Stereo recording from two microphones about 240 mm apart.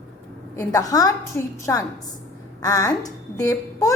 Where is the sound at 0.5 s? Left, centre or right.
Centre.